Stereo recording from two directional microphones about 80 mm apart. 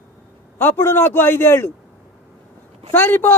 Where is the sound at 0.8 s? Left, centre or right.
Left.